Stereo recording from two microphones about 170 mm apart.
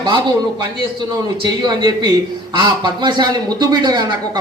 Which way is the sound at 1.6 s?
25° right (ahead or behind).